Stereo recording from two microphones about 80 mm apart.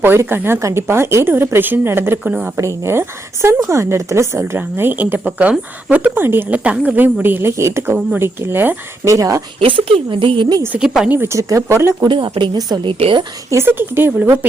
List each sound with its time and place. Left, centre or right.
0.0 s a woman's voice: right
9.0 s speech: right
9.6 s speech: right
10.8 s speech: centre
11.1 s a woman's voice: right
11.3 s speech: right
12.0 s speech: right
12.5 s a woman's voice: right
12.8 s speech: right
13.5 s a woman's voice: right